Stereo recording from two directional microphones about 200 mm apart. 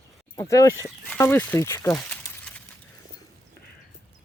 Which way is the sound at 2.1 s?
5° left (ahead or behind).